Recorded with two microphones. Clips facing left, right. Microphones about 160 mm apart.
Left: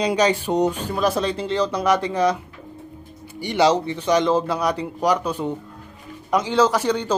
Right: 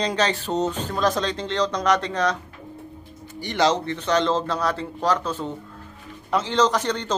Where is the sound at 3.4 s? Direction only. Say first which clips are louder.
Left 3 dB; 10° left (ahead or behind).